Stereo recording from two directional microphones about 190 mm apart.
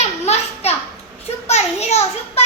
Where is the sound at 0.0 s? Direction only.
35° left (ahead or behind).